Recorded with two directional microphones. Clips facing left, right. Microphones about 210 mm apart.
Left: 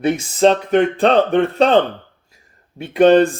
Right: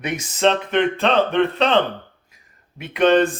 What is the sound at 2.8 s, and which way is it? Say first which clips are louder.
Speech: left 5 dB; 35° left (ahead or behind).